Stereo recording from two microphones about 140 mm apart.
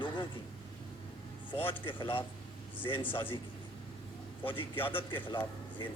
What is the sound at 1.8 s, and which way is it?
Speech, 35° left (ahead or behind).